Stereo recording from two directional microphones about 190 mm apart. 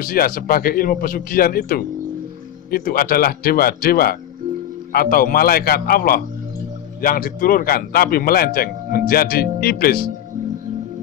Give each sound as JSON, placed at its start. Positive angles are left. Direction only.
{"t": 0.0, "sound": "a man's voice", "side_deg": 50}